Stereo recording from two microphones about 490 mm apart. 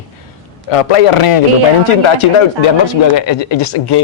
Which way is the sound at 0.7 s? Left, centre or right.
Left.